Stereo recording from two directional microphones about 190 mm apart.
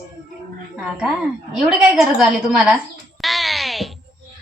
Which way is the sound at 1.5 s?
Centre (ahead or behind).